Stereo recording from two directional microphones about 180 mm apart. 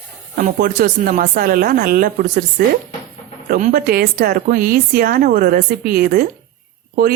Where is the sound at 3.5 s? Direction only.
50° right (ahead or behind).